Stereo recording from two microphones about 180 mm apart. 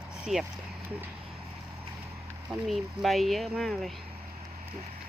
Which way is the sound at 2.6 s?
Centre (ahead or behind).